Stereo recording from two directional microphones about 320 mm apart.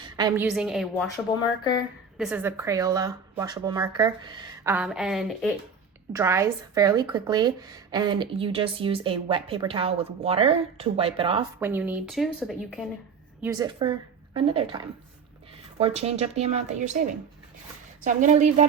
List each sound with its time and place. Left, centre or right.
0.0 s a sound: centre
0.4 s a woman's voice: centre
2.1 s a woman's voice: centre
11.6 s a woman's voice: centre
13.4 s a woman's voice: centre
15.8 s speech: centre
18.0 s speech: right